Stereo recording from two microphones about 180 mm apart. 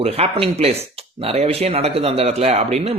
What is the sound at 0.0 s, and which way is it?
Speech, 35° right (ahead or behind).